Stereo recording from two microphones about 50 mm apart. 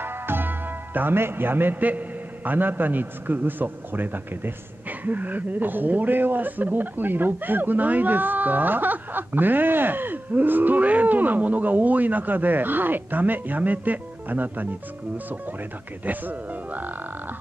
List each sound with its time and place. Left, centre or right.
0.0 s a man's voice: right
16.1 s a man's voice: right